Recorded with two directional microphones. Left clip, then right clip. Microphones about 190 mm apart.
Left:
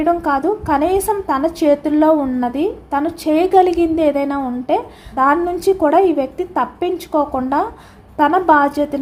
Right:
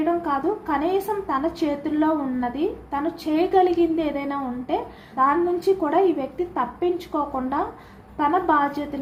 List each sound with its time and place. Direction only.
0.0 s a woman's voice: 60° left (ahead or behind)